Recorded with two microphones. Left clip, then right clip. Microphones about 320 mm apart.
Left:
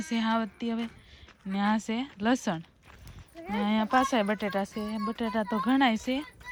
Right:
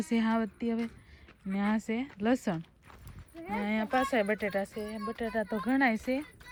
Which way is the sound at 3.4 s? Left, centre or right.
Right.